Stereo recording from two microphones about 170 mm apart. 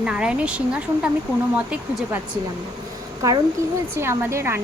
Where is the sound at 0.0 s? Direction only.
5° right (ahead or behind).